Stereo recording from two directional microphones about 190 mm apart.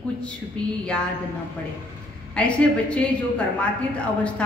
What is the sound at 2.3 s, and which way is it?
A woman's voice, 5° left (ahead or behind).